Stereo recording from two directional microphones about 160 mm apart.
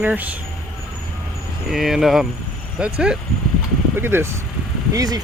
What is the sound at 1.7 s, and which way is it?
Speech, centre (ahead or behind).